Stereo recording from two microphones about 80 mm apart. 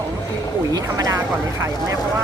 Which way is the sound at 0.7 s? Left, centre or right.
Right.